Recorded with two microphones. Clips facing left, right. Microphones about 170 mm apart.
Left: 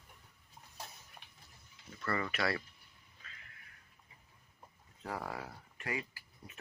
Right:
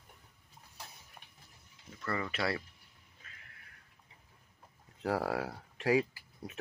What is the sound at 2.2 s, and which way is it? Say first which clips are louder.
Speech: right 1 dB; 25° right (ahead or behind).